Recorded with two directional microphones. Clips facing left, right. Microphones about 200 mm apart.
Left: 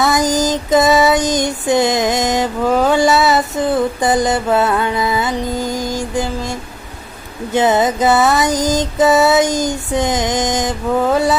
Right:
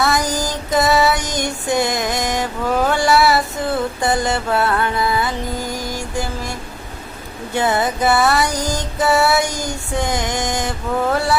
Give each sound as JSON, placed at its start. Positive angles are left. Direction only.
{"t": 0.0, "sound": "female singing", "side_deg": 20}
{"t": 7.5, "sound": "music", "side_deg": 20}